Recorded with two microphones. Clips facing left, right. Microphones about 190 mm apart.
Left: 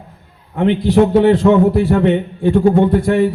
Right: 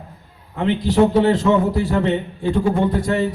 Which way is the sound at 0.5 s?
55° left (ahead or behind).